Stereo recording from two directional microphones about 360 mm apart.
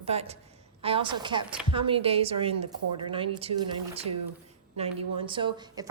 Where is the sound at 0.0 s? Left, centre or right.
Centre.